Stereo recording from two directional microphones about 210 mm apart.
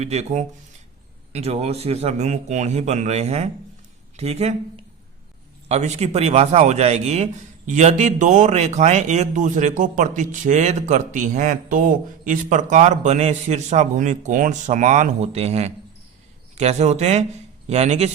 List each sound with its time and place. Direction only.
0.0 s speech: 30° right (ahead or behind)